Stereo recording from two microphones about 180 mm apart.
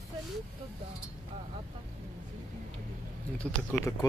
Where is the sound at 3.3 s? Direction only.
5° left (ahead or behind).